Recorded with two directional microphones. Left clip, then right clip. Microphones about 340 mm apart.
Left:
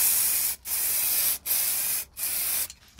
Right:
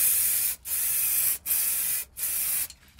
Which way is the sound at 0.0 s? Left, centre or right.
Centre.